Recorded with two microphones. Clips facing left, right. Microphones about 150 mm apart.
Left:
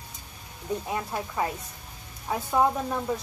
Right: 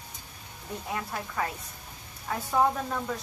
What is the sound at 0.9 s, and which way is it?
A woman's voice, 20° left (ahead or behind).